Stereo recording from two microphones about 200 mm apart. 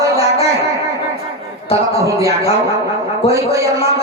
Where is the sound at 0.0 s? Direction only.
15° right (ahead or behind).